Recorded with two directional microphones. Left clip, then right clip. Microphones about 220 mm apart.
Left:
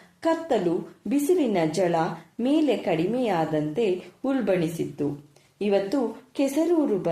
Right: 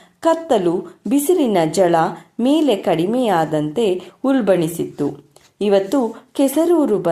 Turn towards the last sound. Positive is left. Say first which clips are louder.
# right 8 dB
turn(degrees=-30)  # may be behind; listen again after turning